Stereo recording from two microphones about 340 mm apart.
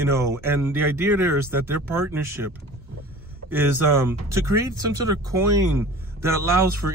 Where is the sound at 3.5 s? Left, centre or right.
Centre.